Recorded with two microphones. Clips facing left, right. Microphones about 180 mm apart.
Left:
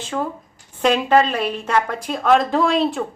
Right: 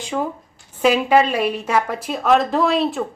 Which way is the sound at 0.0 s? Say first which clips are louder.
Right 1 dB; 15° right (ahead or behind).